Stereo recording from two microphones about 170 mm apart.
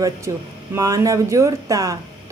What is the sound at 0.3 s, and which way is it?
A woman's voice, 20° right (ahead or behind).